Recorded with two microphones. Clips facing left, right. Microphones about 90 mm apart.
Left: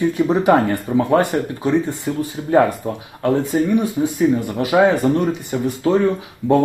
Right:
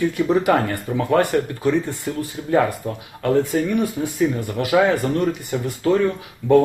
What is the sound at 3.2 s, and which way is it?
Speech, 20° left (ahead or behind).